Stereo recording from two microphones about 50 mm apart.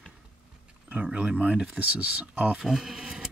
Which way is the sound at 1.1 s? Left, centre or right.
Right.